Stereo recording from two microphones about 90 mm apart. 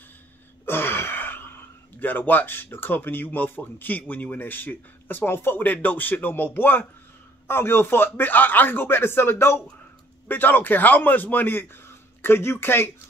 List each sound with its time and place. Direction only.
0.7 s speech: 25° left (ahead or behind)